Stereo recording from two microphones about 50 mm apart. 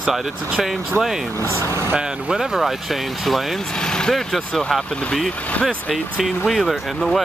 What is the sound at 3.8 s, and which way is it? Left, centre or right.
Speech, centre.